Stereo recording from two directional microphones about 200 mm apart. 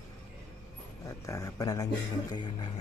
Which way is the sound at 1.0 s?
15° left (ahead or behind).